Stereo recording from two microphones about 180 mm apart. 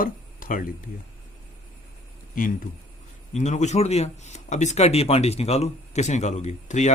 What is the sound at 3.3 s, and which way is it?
Speech, 40° left (ahead or behind).